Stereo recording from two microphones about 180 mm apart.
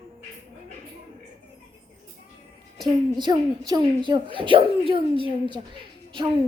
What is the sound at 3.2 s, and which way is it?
Speech, 20° right (ahead or behind).